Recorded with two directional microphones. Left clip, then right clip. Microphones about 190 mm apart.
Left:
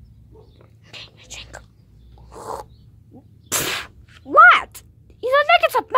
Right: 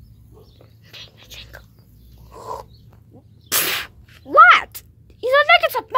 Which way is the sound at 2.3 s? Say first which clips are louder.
Even; 20° left (ahead or behind).